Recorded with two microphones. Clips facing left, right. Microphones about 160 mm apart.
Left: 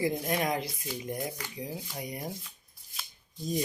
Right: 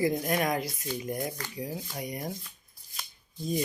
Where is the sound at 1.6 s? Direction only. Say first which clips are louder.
Right 2 dB; 20° left (ahead or behind).